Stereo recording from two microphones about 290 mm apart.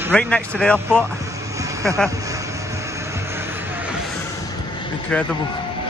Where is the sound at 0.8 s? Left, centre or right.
Centre.